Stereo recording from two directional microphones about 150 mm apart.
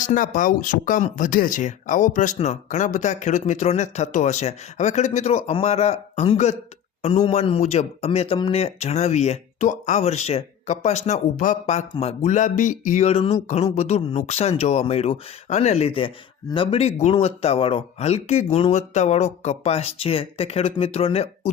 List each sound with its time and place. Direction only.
0.0 s speech: 60° left (ahead or behind); by 21.5 s 40° left (ahead or behind)